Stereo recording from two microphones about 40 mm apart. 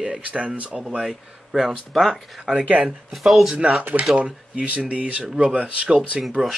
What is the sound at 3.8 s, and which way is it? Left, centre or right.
Speech, right.